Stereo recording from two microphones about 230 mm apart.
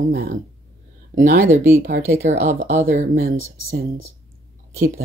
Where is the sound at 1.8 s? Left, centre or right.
Right.